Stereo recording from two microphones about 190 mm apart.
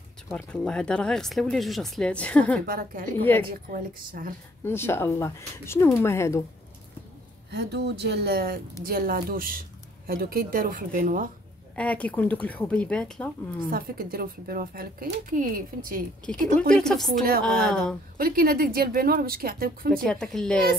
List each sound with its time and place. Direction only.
0.3 s speech: 5° left (ahead or behind)
2.6 s speech: 50° right (ahead or behind)
3.3 s speech: 10° left (ahead or behind)
3.7 s speech: 50° right (ahead or behind)
4.6 s speech: 10° left (ahead or behind)
7.5 s speech: 60° right (ahead or behind); by 11.2 s 45° right (ahead or behind)
11.7 s speech: 5° left (ahead or behind)
13.7 s speech: 50° right (ahead or behind)
16.3 s speech: 5° left (ahead or behind)
18.1 s speech: 50° right (ahead or behind)
20.1 s speech: 5° left (ahead or behind)